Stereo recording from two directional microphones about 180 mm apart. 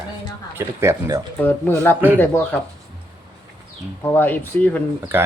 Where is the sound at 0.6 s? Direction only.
15° right (ahead or behind).